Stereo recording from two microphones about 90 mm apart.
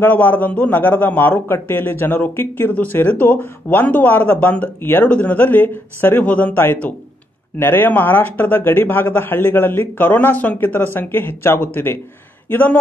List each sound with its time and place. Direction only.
0.0 s a man's voice: 20° left (ahead or behind)